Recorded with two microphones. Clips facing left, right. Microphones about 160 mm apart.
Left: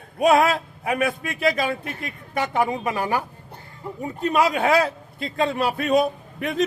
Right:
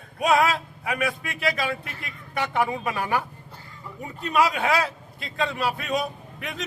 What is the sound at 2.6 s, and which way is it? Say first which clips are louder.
Speech: left 3 dB; 20° left (ahead or behind).